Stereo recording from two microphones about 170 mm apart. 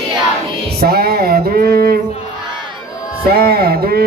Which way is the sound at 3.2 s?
65° right (ahead or behind).